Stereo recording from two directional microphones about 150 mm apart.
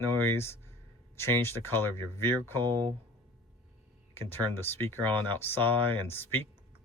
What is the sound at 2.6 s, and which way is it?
Speech, 30° right (ahead or behind).